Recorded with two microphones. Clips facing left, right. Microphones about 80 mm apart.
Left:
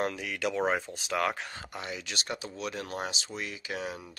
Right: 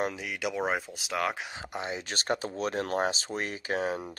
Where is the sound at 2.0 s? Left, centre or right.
Right.